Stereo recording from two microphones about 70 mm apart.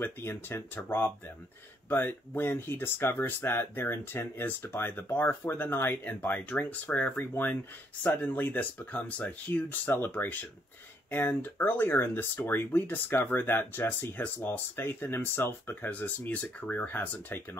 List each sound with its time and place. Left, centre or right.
0.0 s speech: left